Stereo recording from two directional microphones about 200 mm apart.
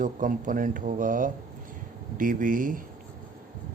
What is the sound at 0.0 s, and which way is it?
Speech, 40° right (ahead or behind).